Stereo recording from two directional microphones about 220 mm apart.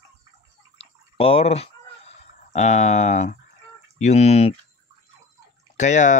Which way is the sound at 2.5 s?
30° left (ahead or behind).